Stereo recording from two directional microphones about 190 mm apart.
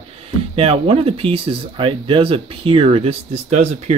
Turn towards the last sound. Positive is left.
turn(degrees=-35)  # may be behind; listen again after turning